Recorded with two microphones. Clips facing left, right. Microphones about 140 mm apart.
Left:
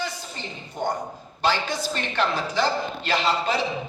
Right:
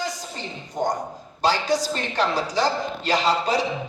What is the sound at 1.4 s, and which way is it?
A man's voice, 40° right (ahead or behind).